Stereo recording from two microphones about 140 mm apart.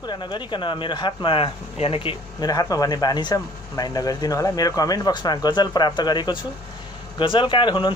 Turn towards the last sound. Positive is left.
turn(degrees=35)  # may be behind; listen again after turning